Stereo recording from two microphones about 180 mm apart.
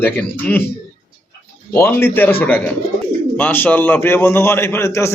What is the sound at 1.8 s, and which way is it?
A man's voice, 10° left (ahead or behind).